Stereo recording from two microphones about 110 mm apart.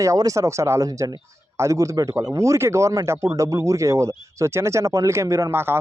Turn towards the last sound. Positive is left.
turn(degrees=-20)  # may be behind; listen again after turning